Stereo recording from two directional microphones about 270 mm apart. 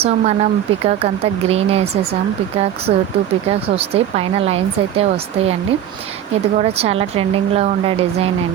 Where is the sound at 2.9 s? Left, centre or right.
Right.